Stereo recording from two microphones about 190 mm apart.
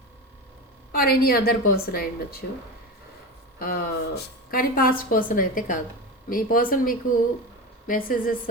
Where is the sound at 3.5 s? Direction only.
50° left (ahead or behind).